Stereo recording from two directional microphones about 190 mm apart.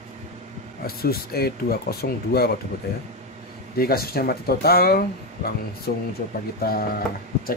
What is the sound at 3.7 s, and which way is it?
Speech, 55° left (ahead or behind).